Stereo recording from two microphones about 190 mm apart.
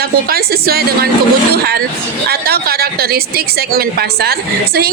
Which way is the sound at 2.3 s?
55° right (ahead or behind).